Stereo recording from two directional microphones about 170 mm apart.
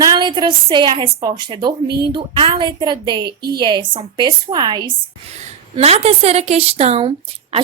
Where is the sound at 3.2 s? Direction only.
70° right (ahead or behind).